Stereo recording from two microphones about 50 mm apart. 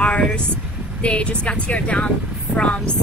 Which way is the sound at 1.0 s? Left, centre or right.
Left.